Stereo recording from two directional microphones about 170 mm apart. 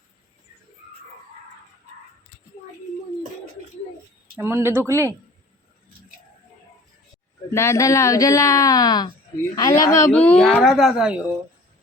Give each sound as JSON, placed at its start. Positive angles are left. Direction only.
{"t": 4.4, "sound": "speech", "side_deg": -15}
{"t": 7.5, "sound": "a woman's voice", "side_deg": 15}